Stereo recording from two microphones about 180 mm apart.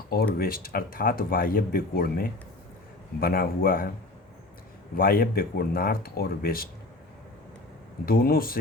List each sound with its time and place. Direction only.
0.3 s speech: 55° left (ahead or behind)
4.9 s speech: 50° left (ahead or behind)
8.0 s speech: 55° left (ahead or behind)